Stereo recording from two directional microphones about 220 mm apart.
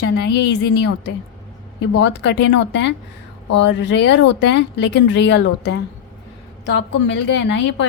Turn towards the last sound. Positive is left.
turn(degrees=55)  # may be behind; listen again after turning